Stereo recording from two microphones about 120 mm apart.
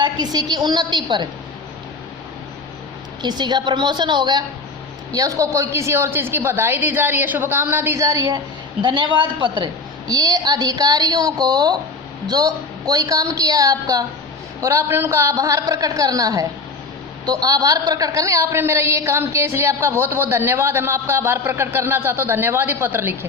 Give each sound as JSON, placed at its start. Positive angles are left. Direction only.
{"t": 0.0, "sound": "a woman's voice", "side_deg": -35}
{"t": 3.2, "sound": "a woman's voice", "side_deg": -40}
{"t": 5.1, "sound": "a woman's voice", "side_deg": -25}
{"t": 8.8, "sound": "a woman's voice", "side_deg": -40}